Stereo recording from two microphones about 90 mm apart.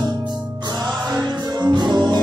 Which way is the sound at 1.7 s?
55° right (ahead or behind).